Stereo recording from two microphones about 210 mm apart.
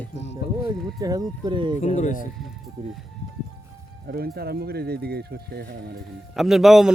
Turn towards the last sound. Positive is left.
turn(degrees=0)  # may be behind; listen again after turning